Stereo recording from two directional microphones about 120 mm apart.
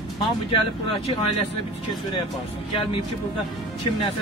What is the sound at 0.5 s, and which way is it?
Speech, 50° left (ahead or behind).